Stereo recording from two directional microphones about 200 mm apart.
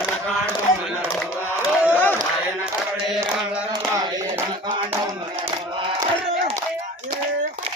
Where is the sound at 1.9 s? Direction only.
10° left (ahead or behind).